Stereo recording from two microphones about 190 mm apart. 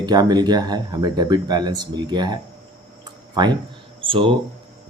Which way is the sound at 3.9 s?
30° right (ahead or behind).